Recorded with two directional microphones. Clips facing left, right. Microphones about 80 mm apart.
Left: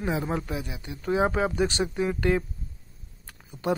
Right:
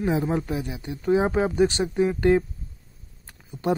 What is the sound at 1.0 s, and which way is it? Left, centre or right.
Speech, right.